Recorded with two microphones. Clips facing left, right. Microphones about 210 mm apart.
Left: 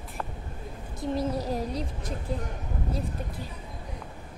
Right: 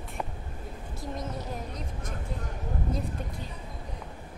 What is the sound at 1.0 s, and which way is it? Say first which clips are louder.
A woman's voice: left 8 dB; 30° left (ahead or behind).